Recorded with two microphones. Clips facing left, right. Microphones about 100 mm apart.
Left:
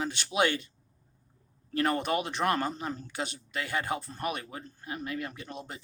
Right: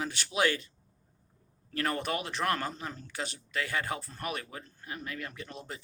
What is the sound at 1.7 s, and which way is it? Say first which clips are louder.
Speech: left 4 dB; 20° left (ahead or behind).